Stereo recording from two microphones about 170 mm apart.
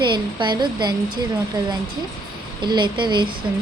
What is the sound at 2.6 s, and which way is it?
Speech, 25° right (ahead or behind).